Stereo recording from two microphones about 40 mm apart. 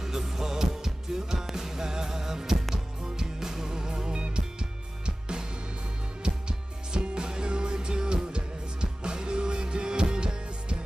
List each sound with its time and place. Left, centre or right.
0.0 s music: centre